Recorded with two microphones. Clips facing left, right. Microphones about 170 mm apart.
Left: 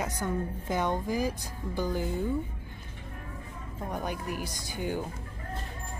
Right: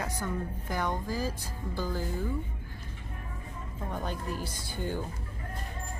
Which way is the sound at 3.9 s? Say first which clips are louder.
Left 1 dB; 15° left (ahead or behind).